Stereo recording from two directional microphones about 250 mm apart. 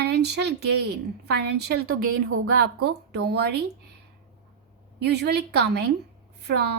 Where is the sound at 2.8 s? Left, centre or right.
Right.